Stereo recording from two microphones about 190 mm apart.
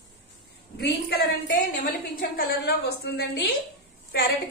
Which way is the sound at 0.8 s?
55° left (ahead or behind).